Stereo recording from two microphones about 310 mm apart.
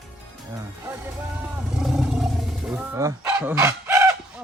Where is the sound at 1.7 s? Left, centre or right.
Centre.